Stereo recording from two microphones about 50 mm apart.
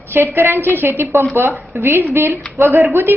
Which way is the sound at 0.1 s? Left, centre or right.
Right.